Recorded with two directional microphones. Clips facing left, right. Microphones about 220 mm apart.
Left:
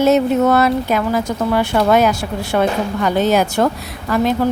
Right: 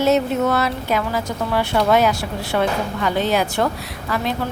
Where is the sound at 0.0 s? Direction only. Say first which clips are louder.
Left 4 dB; 50° left (ahead or behind).